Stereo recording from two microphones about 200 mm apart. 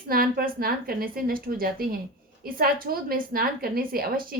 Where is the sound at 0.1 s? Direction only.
45° right (ahead or behind).